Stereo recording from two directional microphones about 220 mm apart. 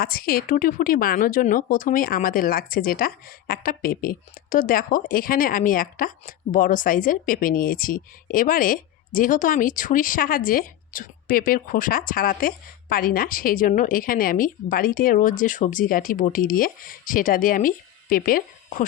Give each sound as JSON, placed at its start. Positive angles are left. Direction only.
{"t": 0.0, "sound": "speech", "side_deg": 40}